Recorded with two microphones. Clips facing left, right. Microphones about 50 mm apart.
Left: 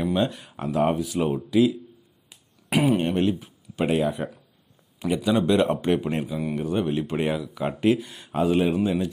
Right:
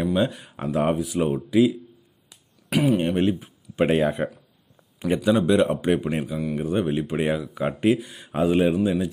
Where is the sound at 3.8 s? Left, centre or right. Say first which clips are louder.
Right 3 dB; right.